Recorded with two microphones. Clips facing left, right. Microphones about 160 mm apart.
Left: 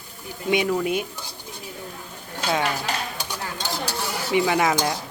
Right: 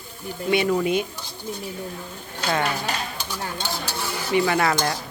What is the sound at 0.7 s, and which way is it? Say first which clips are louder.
Speech: right 2 dB; 5° left (ahead or behind).